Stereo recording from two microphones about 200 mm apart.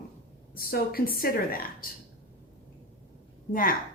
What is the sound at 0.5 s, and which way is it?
Speech, 50° left (ahead or behind).